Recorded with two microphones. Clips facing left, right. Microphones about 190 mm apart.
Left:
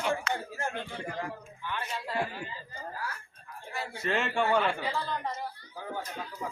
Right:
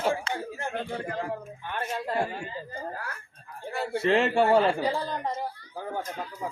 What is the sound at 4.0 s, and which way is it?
A man's voice, 30° right (ahead or behind).